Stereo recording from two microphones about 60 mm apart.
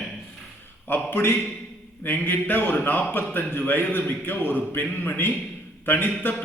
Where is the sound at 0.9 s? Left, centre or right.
Left.